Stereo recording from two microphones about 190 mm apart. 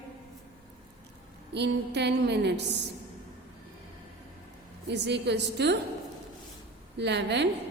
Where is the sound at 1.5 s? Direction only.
65° right (ahead or behind).